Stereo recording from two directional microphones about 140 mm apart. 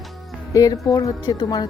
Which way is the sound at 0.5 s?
25° left (ahead or behind).